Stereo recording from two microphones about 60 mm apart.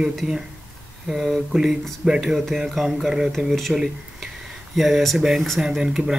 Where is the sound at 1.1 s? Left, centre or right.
Centre.